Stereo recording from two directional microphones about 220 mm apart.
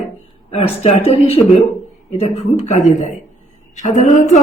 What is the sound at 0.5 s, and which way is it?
A woman's voice, 30° left (ahead or behind).